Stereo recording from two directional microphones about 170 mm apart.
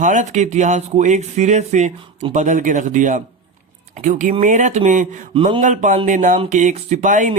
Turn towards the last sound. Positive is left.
turn(degrees=-45)  # may be behind; listen again after turning